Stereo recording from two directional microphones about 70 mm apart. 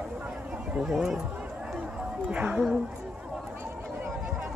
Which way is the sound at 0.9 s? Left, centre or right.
Centre.